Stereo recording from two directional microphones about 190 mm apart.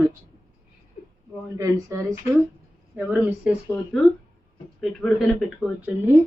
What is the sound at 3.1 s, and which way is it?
Speech, 5° right (ahead or behind).